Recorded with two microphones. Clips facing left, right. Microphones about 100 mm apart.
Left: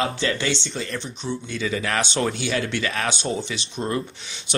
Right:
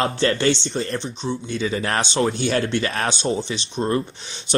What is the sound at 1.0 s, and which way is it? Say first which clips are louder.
Speech: right 3 dB; 25° right (ahead or behind).